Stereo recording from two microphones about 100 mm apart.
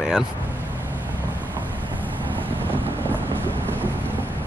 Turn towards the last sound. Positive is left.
turn(degrees=15)  # may be behind; listen again after turning